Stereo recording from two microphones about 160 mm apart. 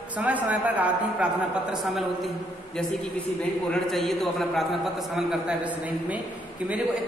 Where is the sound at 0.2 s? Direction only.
10° right (ahead or behind).